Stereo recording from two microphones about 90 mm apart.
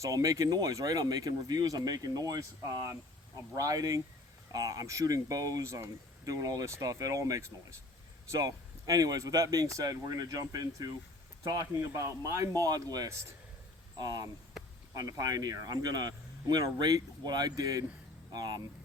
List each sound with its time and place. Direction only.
0.0 s speech: 40° right (ahead or behind)
13.1 s speech: 35° right (ahead or behind)
13.9 s speech: 45° right (ahead or behind)